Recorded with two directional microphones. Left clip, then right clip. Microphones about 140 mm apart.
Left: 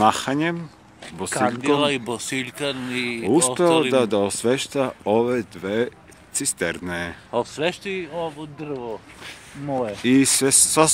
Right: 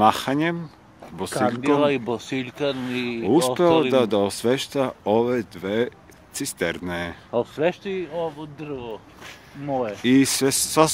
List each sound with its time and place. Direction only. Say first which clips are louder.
0.0 s speech: even; 10° right (ahead or behind)
1.0 s a sound: even; 10° right (ahead or behind)
1.7 s speech: right 2 dB; 45° right (ahead or behind)
3.3 s speech: even; 10° right (ahead or behind)
7.2 s speech: even; 65° right (ahead or behind)
7.6 s speech: right 1 dB; 40° right (ahead or behind)
8.1 s speech: right 1 dB; 15° right (ahead or behind)
8.4 s speech: left 2 dB; 10° left (ahead or behind)
10.0 s speech: left 1 dB; 5° right (ahead or behind)